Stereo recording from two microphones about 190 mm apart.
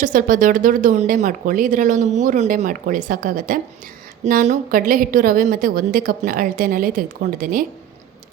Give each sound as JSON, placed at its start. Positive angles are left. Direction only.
{"t": 0.0, "sound": "speech", "side_deg": -45}